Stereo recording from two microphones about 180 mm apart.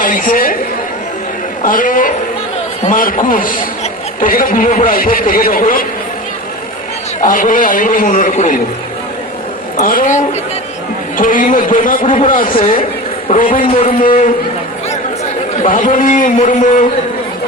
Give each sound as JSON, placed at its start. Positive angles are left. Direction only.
{"t": 0.0, "sound": "chatter", "side_deg": 50}
{"t": 1.6, "sound": "a man's voice", "side_deg": 50}
{"t": 7.2, "sound": "a man's voice", "side_deg": 45}
{"t": 9.7, "sound": "a man's voice", "side_deg": 50}
{"t": 11.2, "sound": "a man's voice", "side_deg": 50}
{"t": 13.7, "sound": "a man's voice", "side_deg": 35}
{"t": 14.0, "sound": "a man's voice", "side_deg": 50}
{"t": 15.6, "sound": "a man's voice", "side_deg": 45}